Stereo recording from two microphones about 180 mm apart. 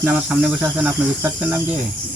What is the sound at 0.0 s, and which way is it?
Cricket, 10° right (ahead or behind).